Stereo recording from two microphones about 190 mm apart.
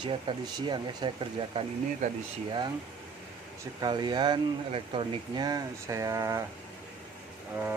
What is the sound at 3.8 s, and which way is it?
Speech, 20° right (ahead or behind).